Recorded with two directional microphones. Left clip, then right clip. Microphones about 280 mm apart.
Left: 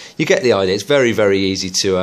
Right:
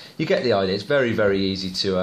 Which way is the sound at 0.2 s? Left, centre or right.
Left.